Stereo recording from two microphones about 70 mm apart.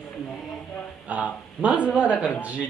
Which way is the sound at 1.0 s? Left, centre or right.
Right.